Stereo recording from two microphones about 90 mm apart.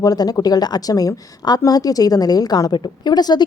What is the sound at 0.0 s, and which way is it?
A woman's voice, 45° left (ahead or behind).